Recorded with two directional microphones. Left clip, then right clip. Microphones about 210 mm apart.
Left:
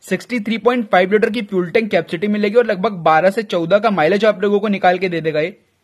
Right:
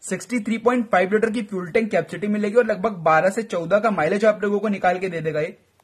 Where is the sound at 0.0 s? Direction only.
35° left (ahead or behind).